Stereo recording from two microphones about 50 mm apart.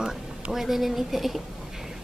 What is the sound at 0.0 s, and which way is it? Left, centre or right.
Speech, centre.